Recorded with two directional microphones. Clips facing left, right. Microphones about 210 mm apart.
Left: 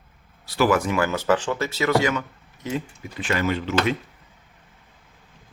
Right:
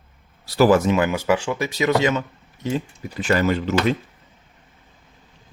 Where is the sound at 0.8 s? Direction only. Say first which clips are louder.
Right 4 dB; 20° right (ahead or behind).